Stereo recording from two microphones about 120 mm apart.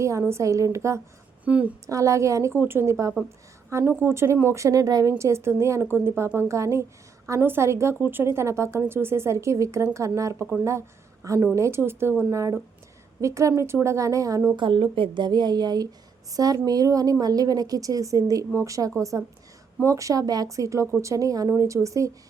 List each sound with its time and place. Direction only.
0.0 s speech: 25° right (ahead or behind)
1.5 s a woman's voice: 10° right (ahead or behind)
1.9 s a woman's voice: 25° right (ahead or behind)
14.5 s speech: 45° right (ahead or behind); by 22.1 s 25° right (ahead or behind)